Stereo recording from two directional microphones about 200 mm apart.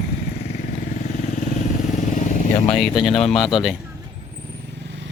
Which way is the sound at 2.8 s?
Centre (ahead or behind).